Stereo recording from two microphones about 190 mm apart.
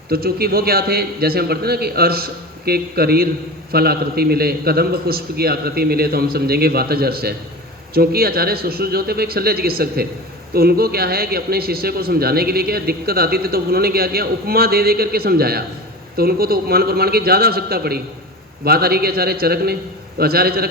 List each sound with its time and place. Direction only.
0.1 s speech: 55° right (ahead or behind)